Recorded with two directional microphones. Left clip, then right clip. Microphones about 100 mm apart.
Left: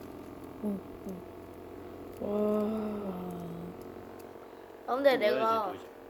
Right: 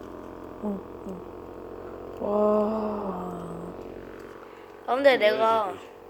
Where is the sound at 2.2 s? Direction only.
30° left (ahead or behind).